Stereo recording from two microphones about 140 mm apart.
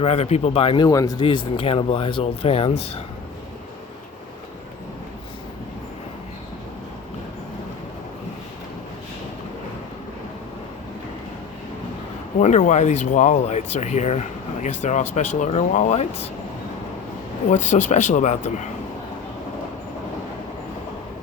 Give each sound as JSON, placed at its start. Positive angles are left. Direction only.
{"t": 0.0, "sound": "speech", "side_deg": 50}
{"t": 0.9, "sound": "speech", "side_deg": 25}
{"t": 1.5, "sound": "speech", "side_deg": 40}
{"t": 12.4, "sound": "speech", "side_deg": 60}
{"t": 17.5, "sound": "speech", "side_deg": 60}